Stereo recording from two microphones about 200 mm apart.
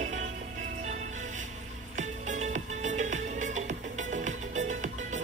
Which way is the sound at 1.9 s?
35° right (ahead or behind).